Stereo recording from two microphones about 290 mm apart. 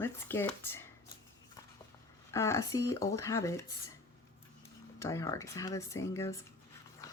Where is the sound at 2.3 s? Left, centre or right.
Centre.